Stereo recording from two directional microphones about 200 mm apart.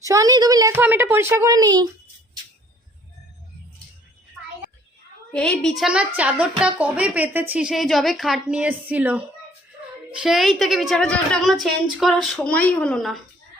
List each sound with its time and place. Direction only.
0.0 s a woman's voice: 15° right (ahead or behind)
5.3 s a woman's voice: 5° left (ahead or behind)